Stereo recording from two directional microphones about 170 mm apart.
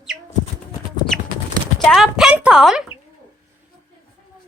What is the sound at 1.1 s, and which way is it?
Clip-clop, 5° left (ahead or behind).